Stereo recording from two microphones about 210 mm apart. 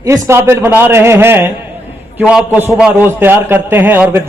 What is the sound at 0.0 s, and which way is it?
A man's voice, 15° right (ahead or behind).